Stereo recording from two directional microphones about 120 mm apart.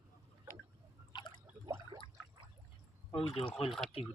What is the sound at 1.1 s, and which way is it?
Drip, 40° left (ahead or behind).